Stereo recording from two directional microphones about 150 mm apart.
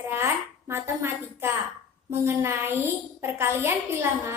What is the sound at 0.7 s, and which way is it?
A woman's voice, 15° right (ahead or behind).